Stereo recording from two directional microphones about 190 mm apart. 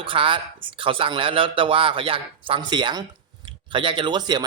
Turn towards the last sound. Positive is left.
turn(degrees=-20)  # may be behind; listen again after turning